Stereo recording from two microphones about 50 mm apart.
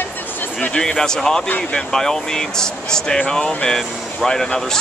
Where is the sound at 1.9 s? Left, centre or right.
Centre.